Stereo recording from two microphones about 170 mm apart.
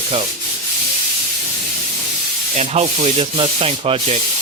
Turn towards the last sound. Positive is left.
turn(degrees=-35)  # may be behind; listen again after turning